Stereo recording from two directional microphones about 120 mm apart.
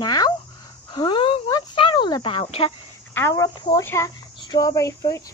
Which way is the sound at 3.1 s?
25° left (ahead or behind).